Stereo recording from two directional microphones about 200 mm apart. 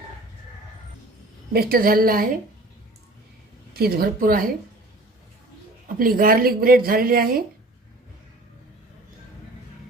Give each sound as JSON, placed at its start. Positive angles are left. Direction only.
{"t": 1.5, "sound": "speech", "side_deg": -45}
{"t": 3.8, "sound": "speech", "side_deg": -50}
{"t": 6.0, "sound": "speech", "side_deg": -45}